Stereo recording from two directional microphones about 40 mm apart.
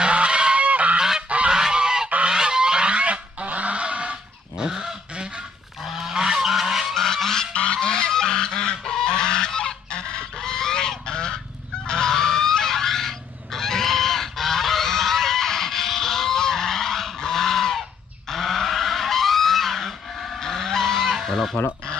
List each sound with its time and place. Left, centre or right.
0.0 s goose: right
0.6 s goose: right
0.9 s goose: centre; by 4.6 s right
4.6 s goose: centre
6.9 s goose: centre
7.5 s goose: left
11.9 s fowl: centre
18.3 s a sound: centre
20.4 s goose: centre